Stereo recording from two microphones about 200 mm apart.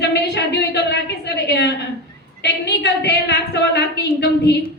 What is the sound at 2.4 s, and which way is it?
A woman's voice, 60° left (ahead or behind).